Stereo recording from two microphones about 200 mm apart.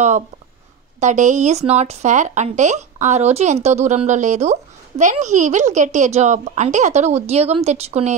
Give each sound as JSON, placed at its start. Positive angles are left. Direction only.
{"t": 0.9, "sound": "speech", "side_deg": -35}